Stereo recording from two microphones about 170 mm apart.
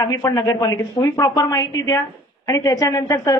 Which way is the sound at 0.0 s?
20° left (ahead or behind).